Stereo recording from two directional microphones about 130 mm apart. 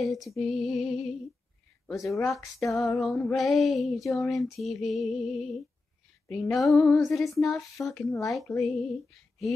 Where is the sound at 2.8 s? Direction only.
Centre (ahead or behind).